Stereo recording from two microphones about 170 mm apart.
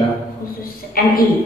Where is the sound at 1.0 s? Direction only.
60° left (ahead or behind).